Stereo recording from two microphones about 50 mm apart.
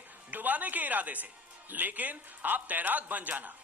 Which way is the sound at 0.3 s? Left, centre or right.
Right.